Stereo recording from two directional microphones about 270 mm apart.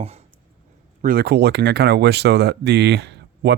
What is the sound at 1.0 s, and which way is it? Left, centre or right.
Speech, right.